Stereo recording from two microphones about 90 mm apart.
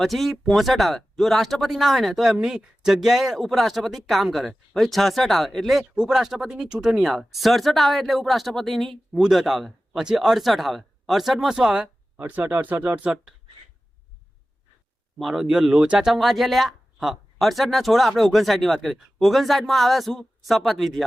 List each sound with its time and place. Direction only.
0.0 s speech: centre (ahead or behind)
12.1 s speech: 20° right (ahead or behind)
15.2 s speech: 5° right (ahead or behind)